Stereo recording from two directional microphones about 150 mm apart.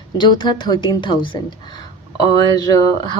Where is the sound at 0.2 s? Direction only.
30° left (ahead or behind).